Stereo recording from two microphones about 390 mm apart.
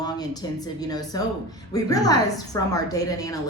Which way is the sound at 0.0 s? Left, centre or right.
Centre.